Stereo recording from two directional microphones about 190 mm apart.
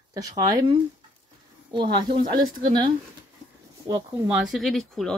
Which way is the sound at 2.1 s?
25° right (ahead or behind).